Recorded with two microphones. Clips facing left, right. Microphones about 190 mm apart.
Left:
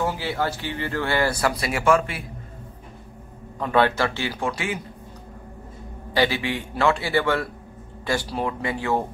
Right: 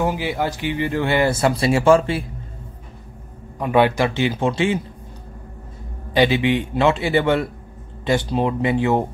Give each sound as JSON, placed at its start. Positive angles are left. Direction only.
{"t": 0.0, "sound": "speech", "side_deg": -15}
{"t": 3.5, "sound": "speech", "side_deg": -15}
{"t": 6.1, "sound": "speech", "side_deg": -20}